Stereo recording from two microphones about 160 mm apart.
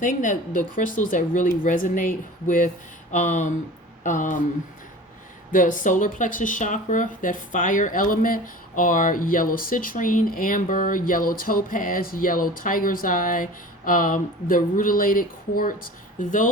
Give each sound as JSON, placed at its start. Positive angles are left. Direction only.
{"t": 0.0, "sound": "speech", "side_deg": 55}
{"t": 5.5, "sound": "speech", "side_deg": 55}